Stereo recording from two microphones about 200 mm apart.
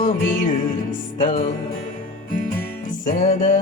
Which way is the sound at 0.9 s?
40° left (ahead or behind).